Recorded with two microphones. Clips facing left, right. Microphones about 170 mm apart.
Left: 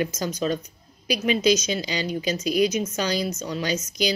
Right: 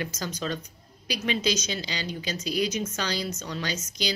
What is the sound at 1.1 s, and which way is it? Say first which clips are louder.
Speech: left 7 dB; 15° left (ahead or behind).